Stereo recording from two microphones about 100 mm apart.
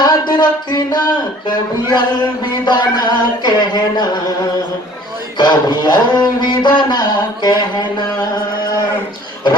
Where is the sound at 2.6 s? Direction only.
45° left (ahead or behind).